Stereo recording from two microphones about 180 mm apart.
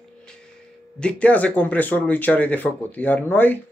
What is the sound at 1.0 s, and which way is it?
Speech, 5° left (ahead or behind).